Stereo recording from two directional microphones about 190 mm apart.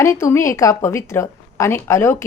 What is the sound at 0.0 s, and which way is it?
A woman's voice, 15° left (ahead or behind).